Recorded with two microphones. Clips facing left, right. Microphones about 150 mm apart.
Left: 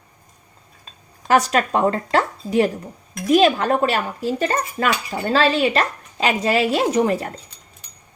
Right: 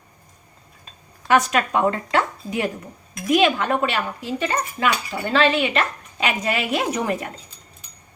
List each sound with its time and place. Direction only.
1.3 s speech: 35° left (ahead or behind)